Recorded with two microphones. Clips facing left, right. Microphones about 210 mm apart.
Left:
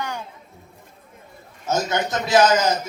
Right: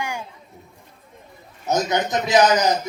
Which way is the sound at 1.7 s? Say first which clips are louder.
Right 2 dB; 20° right (ahead or behind).